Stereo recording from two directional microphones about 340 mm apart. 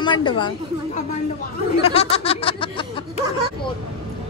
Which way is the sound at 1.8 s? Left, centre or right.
Centre.